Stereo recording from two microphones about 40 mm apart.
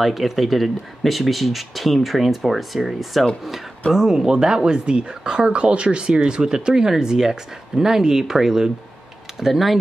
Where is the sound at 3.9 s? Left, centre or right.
Centre.